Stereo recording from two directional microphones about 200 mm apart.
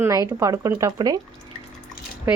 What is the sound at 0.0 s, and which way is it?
Speech, 15° right (ahead or behind).